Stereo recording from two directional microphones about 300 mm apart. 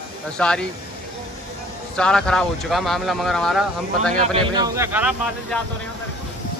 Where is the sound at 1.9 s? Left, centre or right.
Centre.